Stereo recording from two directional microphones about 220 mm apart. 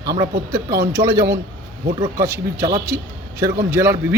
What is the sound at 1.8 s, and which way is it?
Speech, 35° right (ahead or behind).